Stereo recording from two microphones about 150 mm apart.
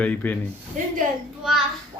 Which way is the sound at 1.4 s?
Centre (ahead or behind).